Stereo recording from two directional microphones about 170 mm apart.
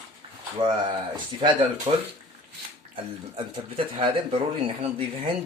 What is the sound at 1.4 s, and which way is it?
Speech, 30° right (ahead or behind).